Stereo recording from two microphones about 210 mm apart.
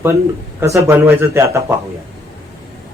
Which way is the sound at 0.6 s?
15° right (ahead or behind).